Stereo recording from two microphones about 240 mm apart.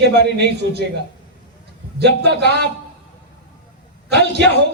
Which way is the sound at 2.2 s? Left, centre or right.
Right.